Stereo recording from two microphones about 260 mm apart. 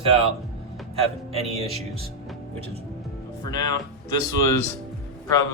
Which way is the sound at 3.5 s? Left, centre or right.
Centre.